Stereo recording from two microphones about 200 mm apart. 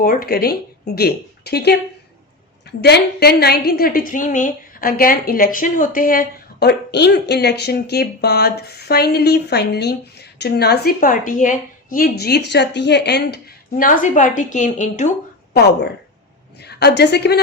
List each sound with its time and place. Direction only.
0.0 s a woman's voice: 50° left (ahead or behind)
15.5 s a woman's voice: 55° left (ahead or behind)